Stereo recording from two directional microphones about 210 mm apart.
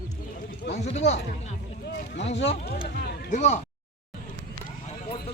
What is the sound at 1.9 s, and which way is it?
Boat, 55° left (ahead or behind).